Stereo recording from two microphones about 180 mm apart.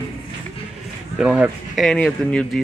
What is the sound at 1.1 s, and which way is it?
Speech, 5° right (ahead or behind).